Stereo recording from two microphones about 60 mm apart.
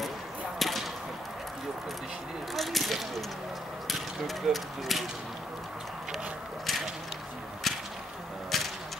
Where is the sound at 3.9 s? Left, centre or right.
Centre.